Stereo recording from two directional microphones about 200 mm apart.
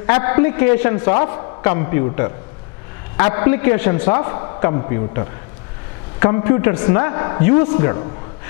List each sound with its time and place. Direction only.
0.0 s a man's voice: 15° left (ahead or behind)